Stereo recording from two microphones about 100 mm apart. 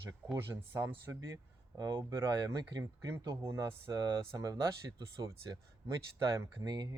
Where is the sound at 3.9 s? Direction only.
35° right (ahead or behind).